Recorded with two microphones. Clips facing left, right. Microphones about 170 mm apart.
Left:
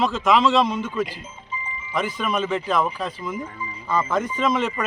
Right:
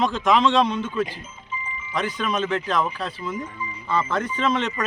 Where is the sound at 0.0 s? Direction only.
Centre (ahead or behind).